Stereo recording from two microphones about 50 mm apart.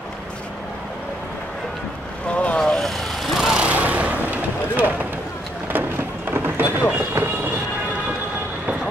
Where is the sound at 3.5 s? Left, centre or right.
Right.